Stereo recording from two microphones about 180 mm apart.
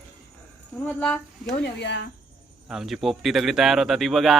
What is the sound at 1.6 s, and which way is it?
Speech, 75° left (ahead or behind).